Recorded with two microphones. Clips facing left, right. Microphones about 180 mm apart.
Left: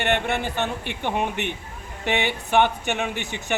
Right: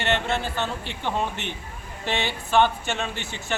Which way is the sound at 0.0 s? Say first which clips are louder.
Left 2 dB; 15° left (ahead or behind).